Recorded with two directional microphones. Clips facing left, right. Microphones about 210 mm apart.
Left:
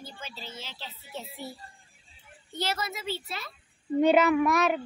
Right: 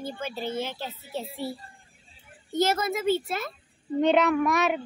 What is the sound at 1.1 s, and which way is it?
Speech, 30° right (ahead or behind).